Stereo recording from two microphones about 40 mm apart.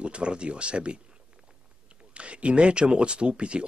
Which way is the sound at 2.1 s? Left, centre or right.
Right.